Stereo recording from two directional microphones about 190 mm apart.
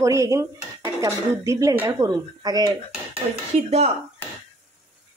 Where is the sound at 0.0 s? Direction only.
15° right (ahead or behind).